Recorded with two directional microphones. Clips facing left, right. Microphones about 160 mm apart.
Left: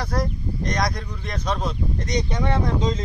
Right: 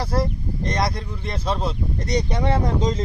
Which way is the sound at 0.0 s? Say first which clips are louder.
Right 2 dB; 30° right (ahead or behind).